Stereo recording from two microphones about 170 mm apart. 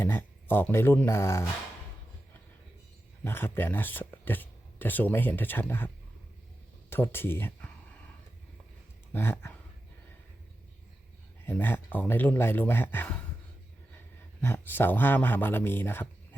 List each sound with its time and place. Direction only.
0.0 s speech: 15° left (ahead or behind)
3.2 s speech: 15° left (ahead or behind)
6.9 s speech: 15° left (ahead or behind)
9.1 s speech: 15° left (ahead or behind)
11.4 s speech: 10° left (ahead or behind)
14.4 s speech: 10° left (ahead or behind)